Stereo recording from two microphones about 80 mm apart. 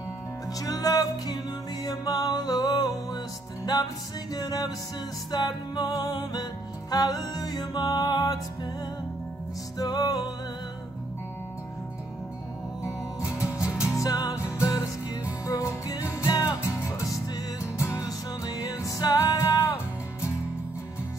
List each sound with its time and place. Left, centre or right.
0.6 s music: left
4.3 s music: left
9.8 s music: left
13.6 s music: left
18.4 s music: left